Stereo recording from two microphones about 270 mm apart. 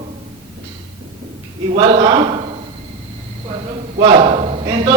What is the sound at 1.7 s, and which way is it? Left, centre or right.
Speech, right.